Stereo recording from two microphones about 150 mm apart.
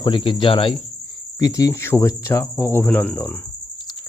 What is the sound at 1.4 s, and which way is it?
Cricket, 20° left (ahead or behind).